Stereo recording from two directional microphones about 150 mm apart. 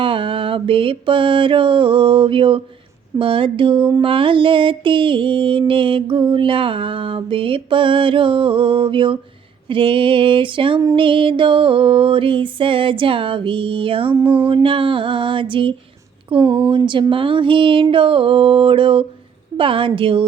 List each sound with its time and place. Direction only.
0.0 s mantra: 35° right (ahead or behind)